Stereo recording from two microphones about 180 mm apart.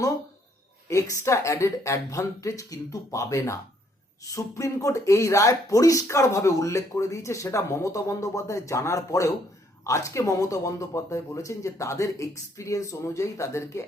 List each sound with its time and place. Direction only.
1.2 s speech: 15° left (ahead or behind)